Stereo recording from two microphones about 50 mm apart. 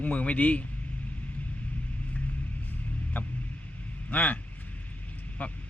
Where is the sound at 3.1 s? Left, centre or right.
Left.